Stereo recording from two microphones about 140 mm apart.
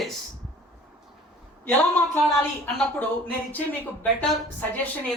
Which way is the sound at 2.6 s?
Centre (ahead or behind).